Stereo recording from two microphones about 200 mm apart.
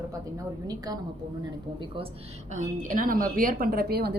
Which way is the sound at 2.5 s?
40° right (ahead or behind).